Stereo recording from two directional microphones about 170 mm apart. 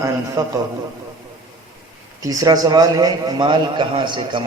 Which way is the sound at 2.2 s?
20° right (ahead or behind).